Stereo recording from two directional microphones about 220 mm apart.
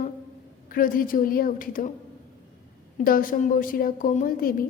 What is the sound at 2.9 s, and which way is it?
A woman's voice, 40° left (ahead or behind).